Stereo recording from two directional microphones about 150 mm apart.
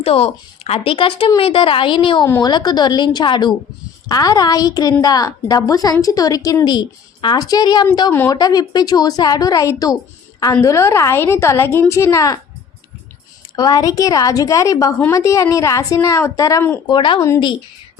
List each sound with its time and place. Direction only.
0.0 s a woman's voice: 40° left (ahead or behind); by 12.4 s 20° left (ahead or behind)
13.6 s a woman's voice: 25° left (ahead or behind)
16.9 s speech: 30° left (ahead or behind)
17.2 s a woman's voice: 20° left (ahead or behind)